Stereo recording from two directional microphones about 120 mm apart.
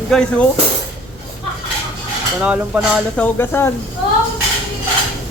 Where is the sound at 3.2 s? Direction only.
20° left (ahead or behind).